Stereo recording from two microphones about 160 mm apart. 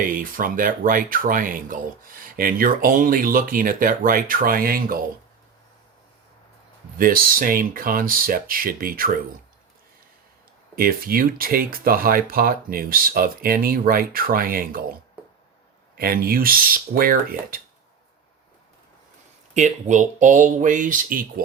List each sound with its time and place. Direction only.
0.0 s speech: 60° right (ahead or behind)
7.0 s speech: 65° right (ahead or behind)
10.8 s speech: 65° right (ahead or behind)
16.0 s speech: 65° right (ahead or behind)
19.5 s speech: 50° right (ahead or behind)